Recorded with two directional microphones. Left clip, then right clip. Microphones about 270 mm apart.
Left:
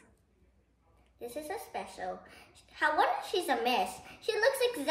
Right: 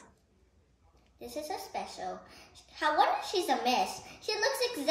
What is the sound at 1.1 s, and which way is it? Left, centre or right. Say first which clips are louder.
Speech: right 1 dB; centre.